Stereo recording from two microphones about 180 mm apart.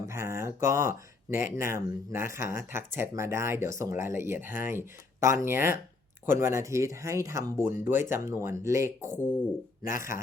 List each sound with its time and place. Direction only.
0.1 s speech: 15° right (ahead or behind)
9.2 s speech: 5° left (ahead or behind)